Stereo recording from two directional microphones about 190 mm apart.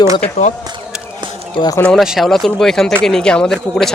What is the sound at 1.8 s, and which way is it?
A man's voice, centre (ahead or behind).